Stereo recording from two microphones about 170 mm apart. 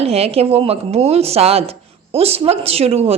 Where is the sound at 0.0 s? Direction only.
35° right (ahead or behind).